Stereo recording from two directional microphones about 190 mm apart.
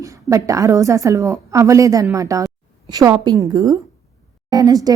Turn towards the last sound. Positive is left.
turn(degrees=-20)  # may be behind; listen again after turning